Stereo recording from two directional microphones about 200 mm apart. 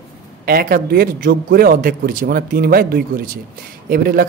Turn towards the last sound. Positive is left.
turn(degrees=-45)  # may be behind; listen again after turning